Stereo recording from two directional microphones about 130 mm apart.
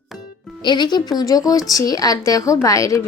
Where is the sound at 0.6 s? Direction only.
35° left (ahead or behind).